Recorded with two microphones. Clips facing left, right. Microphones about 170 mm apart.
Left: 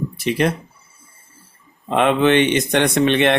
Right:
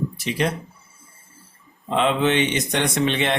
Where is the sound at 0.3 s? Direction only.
60° left (ahead or behind).